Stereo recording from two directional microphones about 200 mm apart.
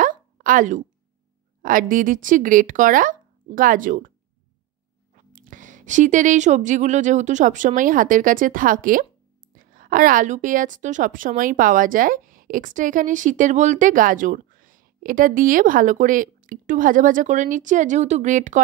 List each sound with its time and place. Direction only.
0.0 s a sound: 40° right (ahead or behind)
1.6 s a woman's voice: 40° right (ahead or behind)
5.1 s a woman's voice: 40° right (ahead or behind)